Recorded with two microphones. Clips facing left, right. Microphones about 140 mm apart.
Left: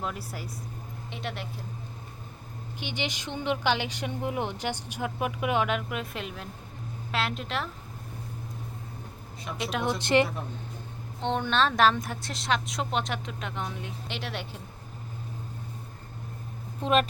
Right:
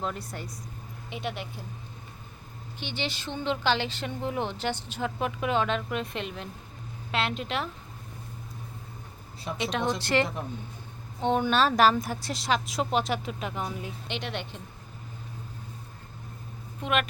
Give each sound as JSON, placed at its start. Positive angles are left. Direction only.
{"t": 0.0, "sound": "a woman's voice", "side_deg": 5}
{"t": 2.8, "sound": "a woman's voice", "side_deg": 15}
{"t": 9.6, "sound": "a woman's voice", "side_deg": 5}
{"t": 10.0, "sound": "a woman's voice", "side_deg": 20}
{"t": 11.2, "sound": "a woman's voice", "side_deg": -5}
{"t": 16.8, "sound": "a woman's voice", "side_deg": 35}